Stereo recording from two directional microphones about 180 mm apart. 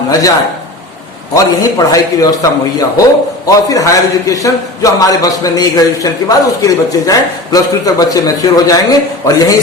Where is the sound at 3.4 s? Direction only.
20° left (ahead or behind).